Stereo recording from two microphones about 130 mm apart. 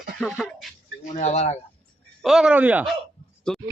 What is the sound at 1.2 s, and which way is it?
Speech, 60° left (ahead or behind).